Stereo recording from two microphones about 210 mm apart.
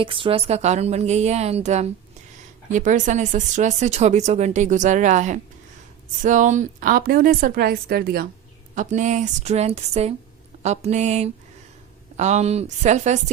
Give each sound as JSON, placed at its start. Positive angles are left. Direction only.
{"t": 0.0, "sound": "a woman's voice", "side_deg": -25}
{"t": 8.7, "sound": "speech", "side_deg": -35}